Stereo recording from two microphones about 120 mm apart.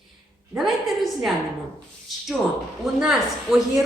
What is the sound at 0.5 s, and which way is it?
Speech, centre (ahead or behind).